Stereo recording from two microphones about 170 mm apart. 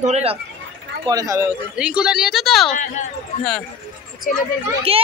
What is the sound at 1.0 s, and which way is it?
Speech, 20° right (ahead or behind).